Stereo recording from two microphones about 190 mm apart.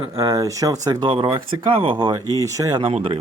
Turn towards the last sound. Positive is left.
turn(degrees=-30)  # may be behind; listen again after turning